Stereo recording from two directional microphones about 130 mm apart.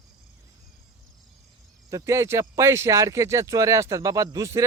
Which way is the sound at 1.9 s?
20° right (ahead or behind).